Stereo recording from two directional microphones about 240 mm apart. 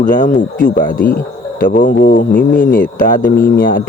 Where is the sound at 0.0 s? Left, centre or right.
Left.